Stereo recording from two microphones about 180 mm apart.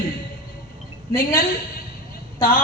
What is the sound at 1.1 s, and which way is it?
Speech, 55° left (ahead or behind).